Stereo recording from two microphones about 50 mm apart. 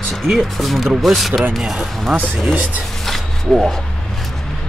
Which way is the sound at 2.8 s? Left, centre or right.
Centre.